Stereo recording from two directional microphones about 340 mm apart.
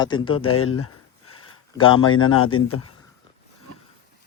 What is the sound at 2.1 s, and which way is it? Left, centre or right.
Speech, left.